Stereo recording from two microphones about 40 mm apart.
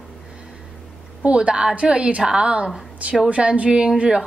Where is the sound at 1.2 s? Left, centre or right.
Right.